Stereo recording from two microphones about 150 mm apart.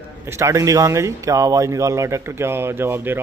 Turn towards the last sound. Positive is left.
turn(degrees=-15)  # may be behind; listen again after turning